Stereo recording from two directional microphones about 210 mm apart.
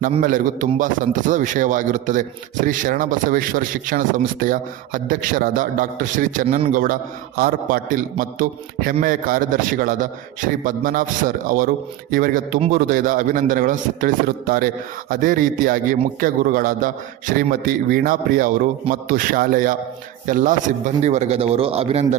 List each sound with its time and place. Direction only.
0.2 s a man's voice: 40° right (ahead or behind)